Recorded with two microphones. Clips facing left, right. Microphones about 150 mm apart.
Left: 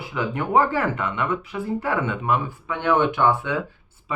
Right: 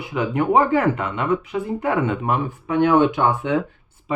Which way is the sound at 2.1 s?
45° right (ahead or behind).